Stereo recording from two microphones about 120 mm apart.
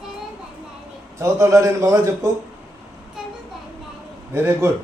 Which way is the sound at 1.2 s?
25° right (ahead or behind).